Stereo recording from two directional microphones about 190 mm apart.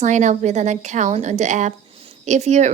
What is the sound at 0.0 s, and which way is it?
A woman's voice, 40° right (ahead or behind).